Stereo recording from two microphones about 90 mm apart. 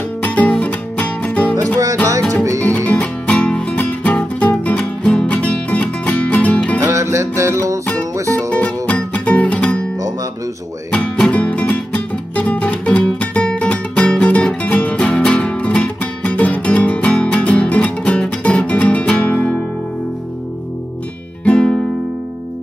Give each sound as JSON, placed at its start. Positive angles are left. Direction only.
{"t": 0.2, "sound": "music", "side_deg": 15}
{"t": 2.6, "sound": "music", "side_deg": 15}
{"t": 6.8, "sound": "music", "side_deg": -35}
{"t": 8.5, "sound": "music", "side_deg": 15}
{"t": 10.9, "sound": "music", "side_deg": 15}
{"t": 21.5, "sound": "music", "side_deg": 10}